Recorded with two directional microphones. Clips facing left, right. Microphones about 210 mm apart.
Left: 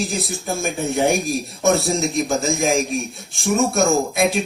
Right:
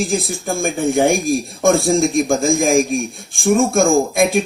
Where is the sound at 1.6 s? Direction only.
50° right (ahead or behind).